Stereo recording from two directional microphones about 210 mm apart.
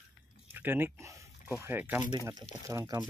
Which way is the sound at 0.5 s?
10° right (ahead or behind).